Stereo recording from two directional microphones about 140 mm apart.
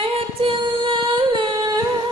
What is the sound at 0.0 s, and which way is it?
Female singing, 40° right (ahead or behind).